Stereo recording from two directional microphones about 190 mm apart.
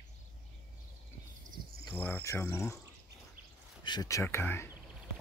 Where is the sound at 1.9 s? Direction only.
10° left (ahead or behind).